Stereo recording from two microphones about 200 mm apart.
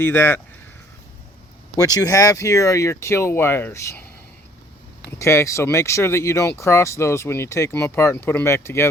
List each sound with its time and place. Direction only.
0.0 s speech: 10° left (ahead or behind)
1.7 s speech: 20° left (ahead or behind)
5.2 s speech: 15° left (ahead or behind)